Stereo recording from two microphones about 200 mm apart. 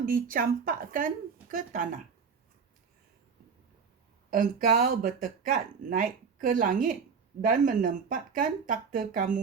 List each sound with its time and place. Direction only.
0.0 s speech: 45° right (ahead or behind)
4.3 s speech: 45° right (ahead or behind)